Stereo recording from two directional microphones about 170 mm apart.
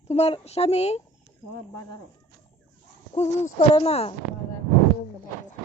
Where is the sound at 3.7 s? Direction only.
35° left (ahead or behind).